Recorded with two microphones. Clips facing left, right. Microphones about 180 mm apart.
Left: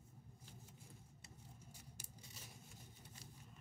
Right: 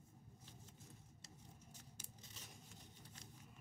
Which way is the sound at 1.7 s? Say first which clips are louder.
Left 1 dB; 10° left (ahead or behind).